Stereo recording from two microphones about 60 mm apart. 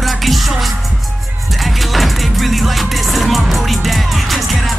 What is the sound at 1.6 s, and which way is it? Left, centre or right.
Music, centre.